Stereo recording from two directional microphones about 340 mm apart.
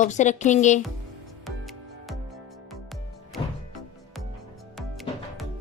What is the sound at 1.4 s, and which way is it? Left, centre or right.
Music, centre.